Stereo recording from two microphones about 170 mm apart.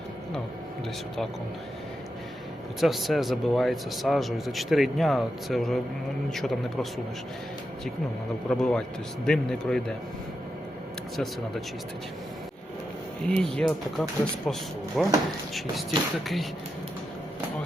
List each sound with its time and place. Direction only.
2.8 s speech: centre (ahead or behind)
8.4 s speech: 5° left (ahead or behind)
13.2 s speech: 5° left (ahead or behind)
16.2 s speech: centre (ahead or behind)